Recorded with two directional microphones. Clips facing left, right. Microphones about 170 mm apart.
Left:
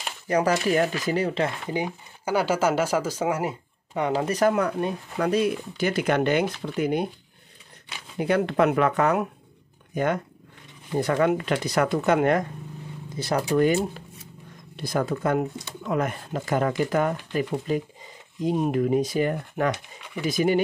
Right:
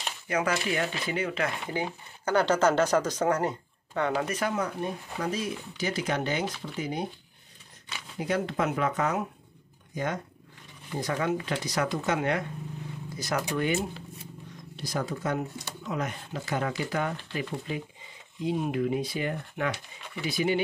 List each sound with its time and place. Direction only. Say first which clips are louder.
0.3 s speech: left 6 dB; 35° left (ahead or behind)
1.7 s speech: left 4 dB; 15° left (ahead or behind)
4.1 s speech: left 10 dB; 35° left (ahead or behind)
4.5 s speech: left 7 dB; 65° left (ahead or behind)
8.2 s speech: left 7 dB; 65° left (ahead or behind)
13.1 s speech: left 7 dB; 30° left (ahead or behind)